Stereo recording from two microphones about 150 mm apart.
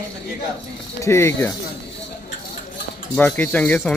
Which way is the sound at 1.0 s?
15° left (ahead or behind).